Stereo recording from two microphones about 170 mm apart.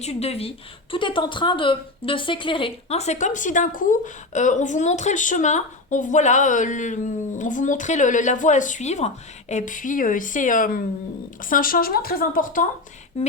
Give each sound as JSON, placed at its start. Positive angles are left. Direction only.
{"t": 0.0, "sound": "a woman's voice", "side_deg": 40}